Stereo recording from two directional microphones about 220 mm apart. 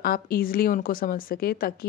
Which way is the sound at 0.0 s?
40° left (ahead or behind).